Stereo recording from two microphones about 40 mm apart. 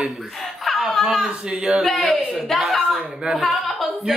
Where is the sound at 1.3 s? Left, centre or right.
Right.